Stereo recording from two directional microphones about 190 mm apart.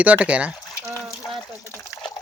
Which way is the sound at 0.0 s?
5° right (ahead or behind).